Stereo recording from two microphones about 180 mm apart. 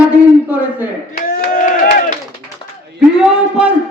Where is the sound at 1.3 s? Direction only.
50° left (ahead or behind).